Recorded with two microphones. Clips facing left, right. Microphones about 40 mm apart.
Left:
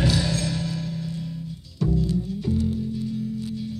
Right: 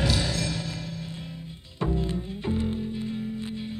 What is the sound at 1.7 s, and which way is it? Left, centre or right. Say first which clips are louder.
Music: left 4 dB; right.